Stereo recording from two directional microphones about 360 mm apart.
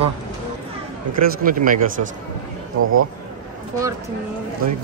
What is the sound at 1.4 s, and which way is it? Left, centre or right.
Speech, right.